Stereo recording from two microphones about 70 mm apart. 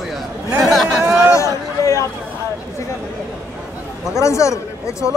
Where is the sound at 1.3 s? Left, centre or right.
Left.